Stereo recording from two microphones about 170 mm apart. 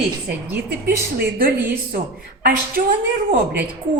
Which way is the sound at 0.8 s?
60° right (ahead or behind).